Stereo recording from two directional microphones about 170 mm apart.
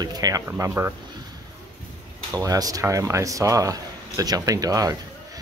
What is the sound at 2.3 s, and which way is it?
Speech, 20° right (ahead or behind).